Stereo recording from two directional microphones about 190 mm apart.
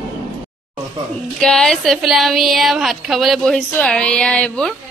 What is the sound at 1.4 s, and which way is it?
A woman's voice, 5° left (ahead or behind).